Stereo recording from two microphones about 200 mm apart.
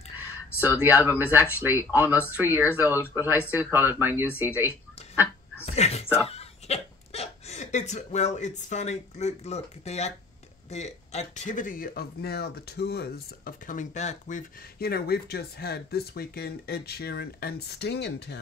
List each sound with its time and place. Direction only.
0.6 s speech: 10° right (ahead or behind)
5.7 s a sound: 30° left (ahead or behind)
6.2 s speech: 30° left (ahead or behind); by 18.4 s 55° left (ahead or behind)